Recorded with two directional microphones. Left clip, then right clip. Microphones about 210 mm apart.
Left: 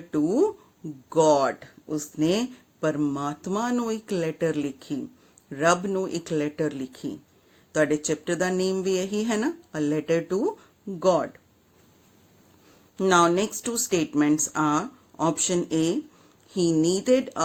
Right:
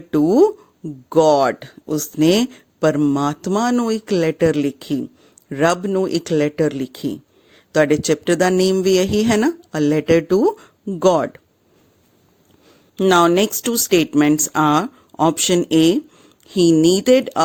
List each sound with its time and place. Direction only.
0.1 s speech: 40° right (ahead or behind)
13.0 s speech: 40° right (ahead or behind)